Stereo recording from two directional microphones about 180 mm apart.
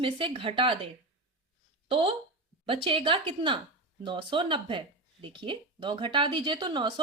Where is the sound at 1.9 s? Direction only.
30° right (ahead or behind).